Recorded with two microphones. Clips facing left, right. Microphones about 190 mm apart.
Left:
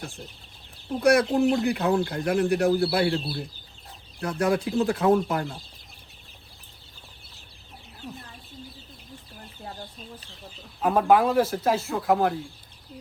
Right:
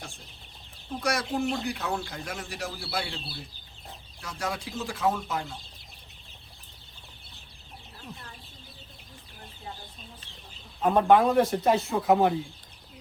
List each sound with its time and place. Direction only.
0.9 s speech: 55° left (ahead or behind)
10.8 s speech: 5° left (ahead or behind)